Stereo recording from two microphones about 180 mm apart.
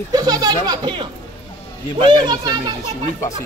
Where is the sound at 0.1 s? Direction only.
20° right (ahead or behind).